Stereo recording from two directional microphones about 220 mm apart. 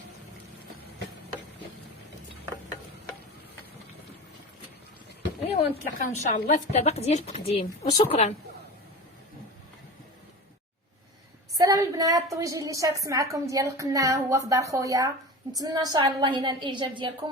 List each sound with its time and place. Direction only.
5.5 s a woman's voice: 35° left (ahead or behind)
11.5 s a woman's voice: 15° right (ahead or behind)